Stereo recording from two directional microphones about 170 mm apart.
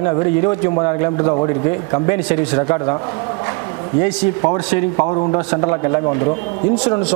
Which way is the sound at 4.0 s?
40° left (ahead or behind).